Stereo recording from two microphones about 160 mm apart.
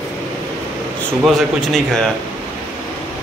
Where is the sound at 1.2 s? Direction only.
Centre (ahead or behind).